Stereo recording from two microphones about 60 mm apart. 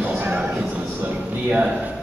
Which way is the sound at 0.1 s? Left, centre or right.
Right.